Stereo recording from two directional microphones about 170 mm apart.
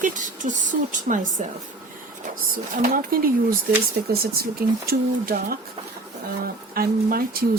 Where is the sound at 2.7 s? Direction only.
55° right (ahead or behind).